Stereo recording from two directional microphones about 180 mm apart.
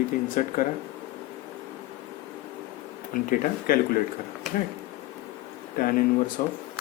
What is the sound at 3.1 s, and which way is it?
Speech, 55° left (ahead or behind).